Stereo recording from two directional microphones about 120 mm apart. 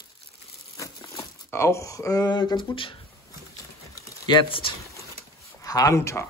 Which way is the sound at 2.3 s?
40° left (ahead or behind).